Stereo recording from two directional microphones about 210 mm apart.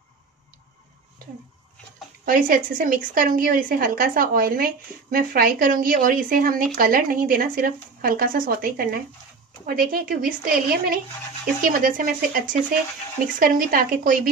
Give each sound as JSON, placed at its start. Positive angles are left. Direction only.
{"t": 2.2, "sound": "a woman's voice", "side_deg": -45}